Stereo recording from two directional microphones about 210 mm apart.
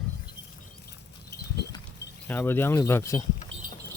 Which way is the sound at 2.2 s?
10° left (ahead or behind).